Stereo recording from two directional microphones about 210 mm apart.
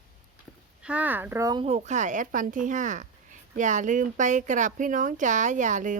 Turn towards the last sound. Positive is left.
turn(degrees=-35)  # may be behind; listen again after turning